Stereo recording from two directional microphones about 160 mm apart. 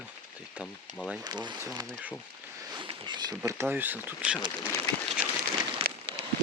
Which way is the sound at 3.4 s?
15° right (ahead or behind).